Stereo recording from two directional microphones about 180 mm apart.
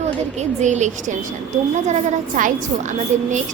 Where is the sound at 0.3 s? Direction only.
40° right (ahead or behind).